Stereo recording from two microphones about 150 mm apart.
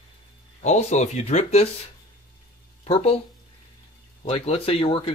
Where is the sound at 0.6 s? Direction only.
50° left (ahead or behind).